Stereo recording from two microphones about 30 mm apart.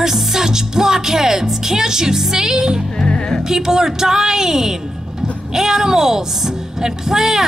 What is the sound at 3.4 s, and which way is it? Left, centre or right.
Speech, centre.